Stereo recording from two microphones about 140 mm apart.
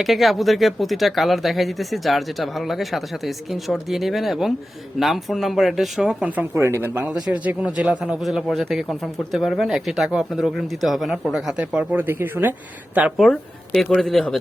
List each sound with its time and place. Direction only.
0.0 s speech: centre (ahead or behind)
13.1 s speech: centre (ahead or behind)